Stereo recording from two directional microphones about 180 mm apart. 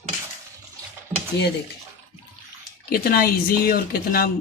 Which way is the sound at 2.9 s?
55° left (ahead or behind).